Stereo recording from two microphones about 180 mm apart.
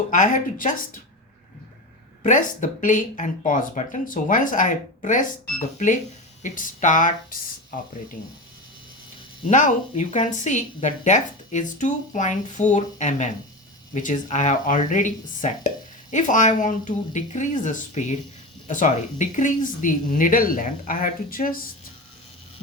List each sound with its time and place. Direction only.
0.1 s speech: 45° left (ahead or behind)
2.2 s speech: 45° left (ahead or behind)
9.5 s speech: 45° left (ahead or behind)